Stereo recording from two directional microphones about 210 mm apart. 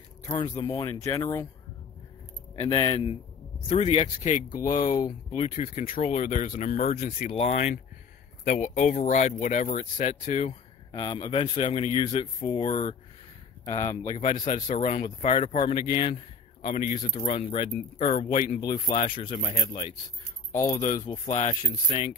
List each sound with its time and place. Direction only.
0.2 s speech: 25° left (ahead or behind)
2.6 s speech: 25° left (ahead or behind)
10.9 s speech: 20° left (ahead or behind)
14.1 s speech: 30° left (ahead or behind)
15.3 s speech: 25° left (ahead or behind)
16.6 s speech: 35° left (ahead or behind)
19.0 s speech: 25° left (ahead or behind)
20.5 s speech: 15° left (ahead or behind)
20.8 s speech: 35° left (ahead or behind)